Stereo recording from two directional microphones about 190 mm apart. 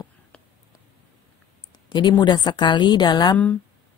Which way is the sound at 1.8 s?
25° left (ahead or behind).